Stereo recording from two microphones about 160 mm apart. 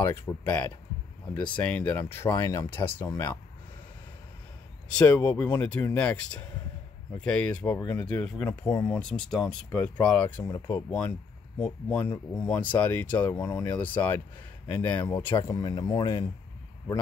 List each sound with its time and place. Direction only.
0.0 s speech: 15° left (ahead or behind)
4.9 s speech: 10° left (ahead or behind); by 16.3 s 25° left (ahead or behind)